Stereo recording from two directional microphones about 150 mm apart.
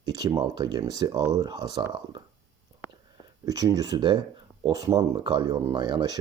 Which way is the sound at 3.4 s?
25° right (ahead or behind).